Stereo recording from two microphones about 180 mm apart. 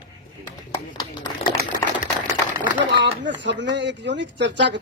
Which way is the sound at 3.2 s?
80° right.